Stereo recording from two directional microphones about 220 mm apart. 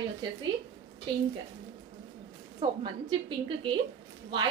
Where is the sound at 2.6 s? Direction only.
20° right (ahead or behind).